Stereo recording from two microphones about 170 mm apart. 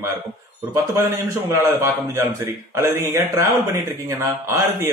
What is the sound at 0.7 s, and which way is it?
Speech, 15° right (ahead or behind).